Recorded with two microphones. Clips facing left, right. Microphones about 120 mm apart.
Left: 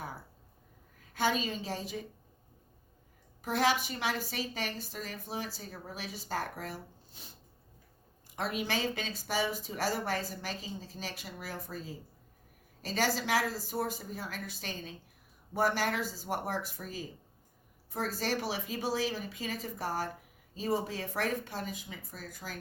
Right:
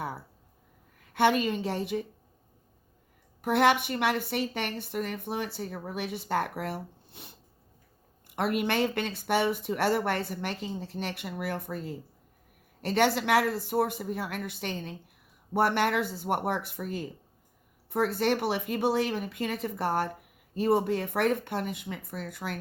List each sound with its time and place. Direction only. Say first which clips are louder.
1.1 s a woman's voice: right 7 dB; 65° right (ahead or behind)
3.4 s a woman's voice: right 6 dB; 60° right (ahead or behind)